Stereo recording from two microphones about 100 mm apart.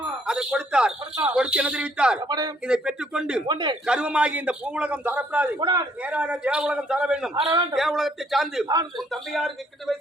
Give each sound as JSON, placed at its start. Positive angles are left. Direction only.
{"t": 0.3, "sound": "speech", "side_deg": -10}
{"t": 2.2, "sound": "a man's voice", "side_deg": -45}
{"t": 2.6, "sound": "speech", "side_deg": -10}
{"t": 3.4, "sound": "a man's voice", "side_deg": -50}
{"t": 3.8, "sound": "speech", "side_deg": -10}
{"t": 5.5, "sound": "a man's voice", "side_deg": -45}
{"t": 6.0, "sound": "speech", "side_deg": -15}
{"t": 7.4, "sound": "a man's voice", "side_deg": -40}
{"t": 7.8, "sound": "speech", "side_deg": 0}
{"t": 8.6, "sound": "a man's voice", "side_deg": -40}
{"t": 9.0, "sound": "speech", "side_deg": 0}